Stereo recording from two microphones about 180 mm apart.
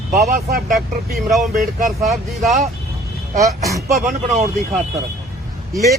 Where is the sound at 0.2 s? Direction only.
55° right (ahead or behind).